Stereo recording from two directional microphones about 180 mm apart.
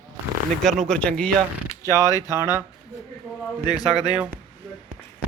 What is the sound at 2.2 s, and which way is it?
Speech, 15° right (ahead or behind).